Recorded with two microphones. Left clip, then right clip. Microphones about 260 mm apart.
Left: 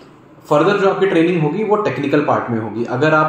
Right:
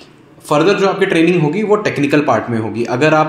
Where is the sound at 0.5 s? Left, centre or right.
Right.